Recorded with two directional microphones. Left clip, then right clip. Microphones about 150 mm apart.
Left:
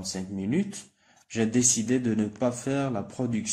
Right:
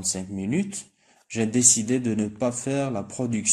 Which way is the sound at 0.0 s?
30° right (ahead or behind).